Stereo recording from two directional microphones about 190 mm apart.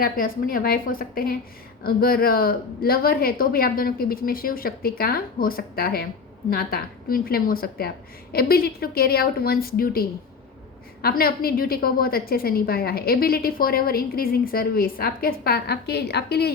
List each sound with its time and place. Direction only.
0.0 s a woman's voice: 50° left (ahead or behind)